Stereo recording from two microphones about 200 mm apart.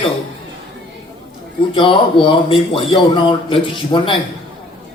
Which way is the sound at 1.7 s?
25° left (ahead or behind).